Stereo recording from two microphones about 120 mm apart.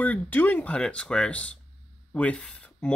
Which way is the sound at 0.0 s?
15° left (ahead or behind).